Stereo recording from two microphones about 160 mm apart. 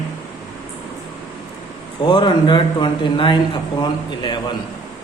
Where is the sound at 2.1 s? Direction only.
30° left (ahead or behind).